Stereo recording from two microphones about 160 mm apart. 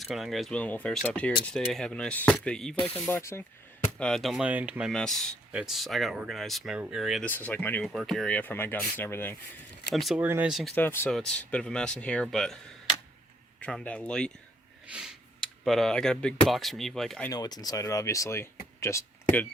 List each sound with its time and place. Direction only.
0.0 s speech: centre (ahead or behind); by 3.4 s 15° left (ahead or behind)
3.9 s speech: 5° left (ahead or behind)
4.9 s speech: 5° left (ahead or behind)
7.3 s speech: 10° left (ahead or behind)
9.9 s speech: centre (ahead or behind)
10.2 s speech: 10° right (ahead or behind)
10.5 s speech: centre (ahead or behind)
10.8 s speech: 15° left (ahead or behind)
13.6 s speech: 5° left (ahead or behind)
14.8 s a sound: 5° right (ahead or behind)
15.6 s speech: centre (ahead or behind)
17.2 s speech: 25° left (ahead or behind)